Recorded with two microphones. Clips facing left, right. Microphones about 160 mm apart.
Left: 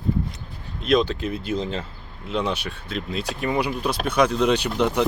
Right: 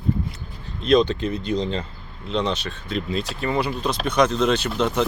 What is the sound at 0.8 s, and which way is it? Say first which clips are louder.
Speech: right 3 dB; 5° left (ahead or behind).